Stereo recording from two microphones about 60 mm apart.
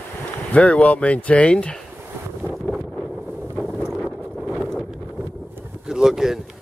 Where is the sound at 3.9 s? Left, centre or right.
Centre.